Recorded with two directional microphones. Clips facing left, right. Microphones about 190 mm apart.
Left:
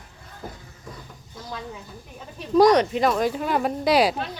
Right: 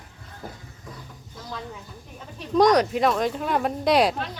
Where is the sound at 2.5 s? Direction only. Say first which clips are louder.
Left 2 dB; 5° left (ahead or behind).